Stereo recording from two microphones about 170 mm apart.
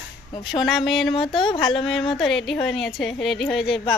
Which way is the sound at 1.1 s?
30° left (ahead or behind).